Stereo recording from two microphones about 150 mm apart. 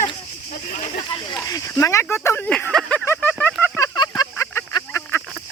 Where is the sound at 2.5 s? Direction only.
5° left (ahead or behind).